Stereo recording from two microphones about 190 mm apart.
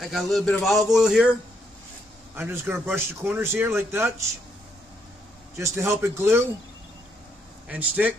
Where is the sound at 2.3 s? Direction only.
10° right (ahead or behind).